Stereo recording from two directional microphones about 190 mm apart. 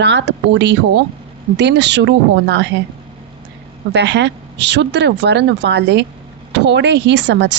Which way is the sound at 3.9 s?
65° right (ahead or behind).